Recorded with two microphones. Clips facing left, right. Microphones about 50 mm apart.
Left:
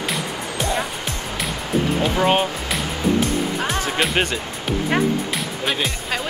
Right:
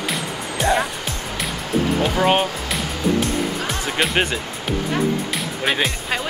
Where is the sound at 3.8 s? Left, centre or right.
Centre.